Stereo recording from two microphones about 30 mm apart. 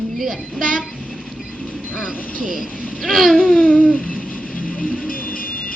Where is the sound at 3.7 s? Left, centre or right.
Left.